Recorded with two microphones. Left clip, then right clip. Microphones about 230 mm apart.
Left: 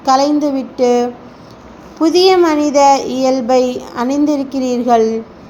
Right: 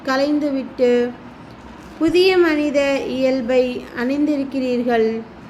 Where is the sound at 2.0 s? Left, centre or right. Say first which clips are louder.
Left 5 dB; centre.